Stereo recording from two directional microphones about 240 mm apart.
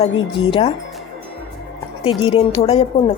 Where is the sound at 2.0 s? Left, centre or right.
Left.